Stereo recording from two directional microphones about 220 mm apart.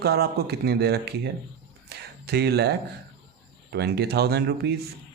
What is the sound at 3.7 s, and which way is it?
Speech, 50° right (ahead or behind).